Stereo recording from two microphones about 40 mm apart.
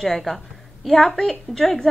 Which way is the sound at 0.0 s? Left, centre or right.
Centre.